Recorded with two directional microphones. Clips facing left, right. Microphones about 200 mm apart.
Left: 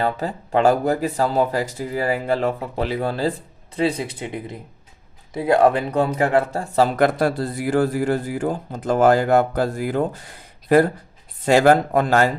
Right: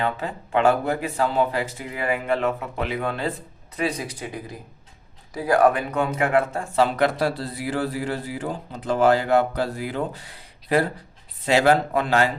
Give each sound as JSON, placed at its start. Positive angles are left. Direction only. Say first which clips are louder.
{"t": 0.0, "sound": "speech", "louder": "left 3 dB", "side_deg": 35}